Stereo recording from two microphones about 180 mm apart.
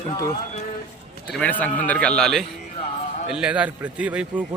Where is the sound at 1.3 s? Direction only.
10° left (ahead or behind); by 4.4 s 5° right (ahead or behind).